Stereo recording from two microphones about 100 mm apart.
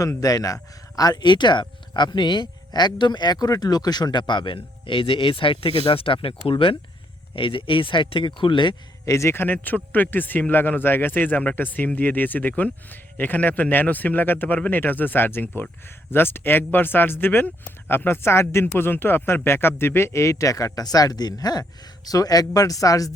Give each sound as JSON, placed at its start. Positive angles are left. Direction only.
{"t": 0.0, "sound": "speech", "side_deg": 35}
{"t": 9.0, "sound": "a man's voice", "side_deg": 30}